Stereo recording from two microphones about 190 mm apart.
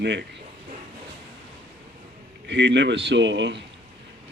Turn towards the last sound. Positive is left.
turn(degrees=-65)  # may be behind; listen again after turning